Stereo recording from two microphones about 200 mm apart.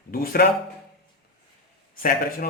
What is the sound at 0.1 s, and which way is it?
Speech, 45° left (ahead or behind).